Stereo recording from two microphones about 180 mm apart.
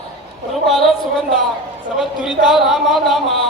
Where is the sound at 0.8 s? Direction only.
Centre (ahead or behind).